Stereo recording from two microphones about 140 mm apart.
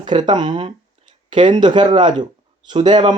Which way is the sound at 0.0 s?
35° right (ahead or behind).